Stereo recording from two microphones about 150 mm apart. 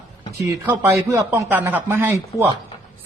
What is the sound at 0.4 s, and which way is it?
A man's voice, 20° right (ahead or behind).